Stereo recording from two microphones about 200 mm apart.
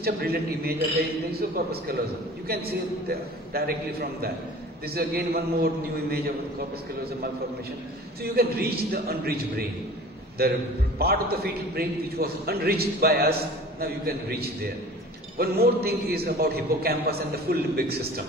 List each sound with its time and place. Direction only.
0.0 s a man's voice: 50° right (ahead or behind)
8.2 s a man's voice: 50° right (ahead or behind)